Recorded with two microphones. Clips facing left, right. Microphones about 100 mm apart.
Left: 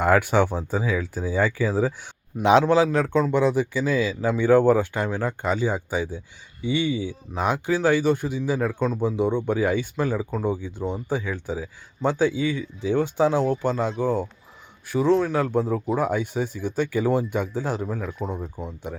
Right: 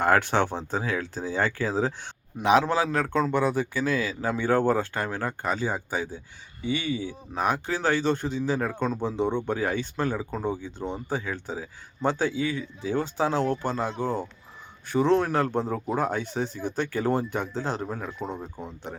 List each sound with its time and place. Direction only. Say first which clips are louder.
0.0 s speech: left 3 dB; 15° left (ahead or behind)
2.4 s a man's voice: left 3 dB; 30° left (ahead or behind)
2.6 s speech: left 6 dB; 20° left (ahead or behind)
14.9 s speech: left 2 dB; centre (ahead or behind)